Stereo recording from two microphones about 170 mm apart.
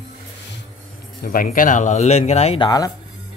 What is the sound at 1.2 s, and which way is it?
Speech, 55° left (ahead or behind).